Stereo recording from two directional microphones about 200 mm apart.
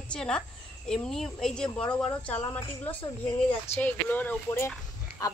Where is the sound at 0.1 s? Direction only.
5° left (ahead or behind).